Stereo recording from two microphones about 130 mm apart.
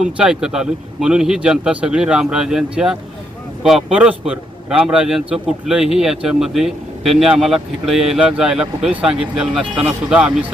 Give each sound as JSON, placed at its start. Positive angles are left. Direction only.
{"t": 0.0, "sound": "a man's voice", "side_deg": -5}